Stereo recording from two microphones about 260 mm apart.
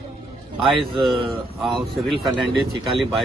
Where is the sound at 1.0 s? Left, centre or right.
Centre.